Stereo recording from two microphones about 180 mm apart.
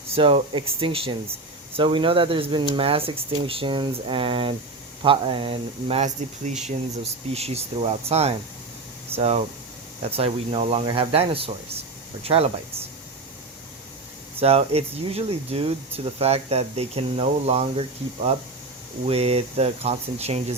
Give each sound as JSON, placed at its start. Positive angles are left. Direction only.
{"t": 0.1, "sound": "speech", "side_deg": -30}
{"t": 14.3, "sound": "speech", "side_deg": -35}